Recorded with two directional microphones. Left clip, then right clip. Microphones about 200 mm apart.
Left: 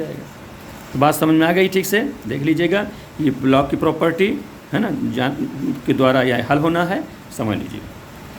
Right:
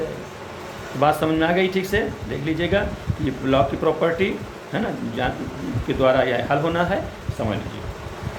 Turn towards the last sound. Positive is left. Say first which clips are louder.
# left 2 dB
turn(degrees=45)  # may be behind; listen again after turning